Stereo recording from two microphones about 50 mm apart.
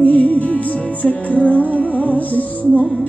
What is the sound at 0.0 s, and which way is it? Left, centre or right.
Music, left.